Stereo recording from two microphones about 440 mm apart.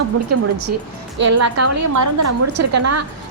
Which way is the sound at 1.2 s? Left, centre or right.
Right.